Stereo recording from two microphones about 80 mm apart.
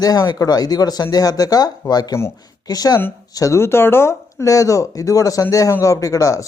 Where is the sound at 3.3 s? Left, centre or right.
Left.